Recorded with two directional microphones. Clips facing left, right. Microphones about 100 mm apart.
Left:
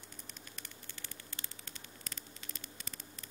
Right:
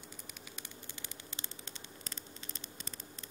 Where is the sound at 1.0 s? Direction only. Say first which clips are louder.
Right 2 dB; 25° right (ahead or behind).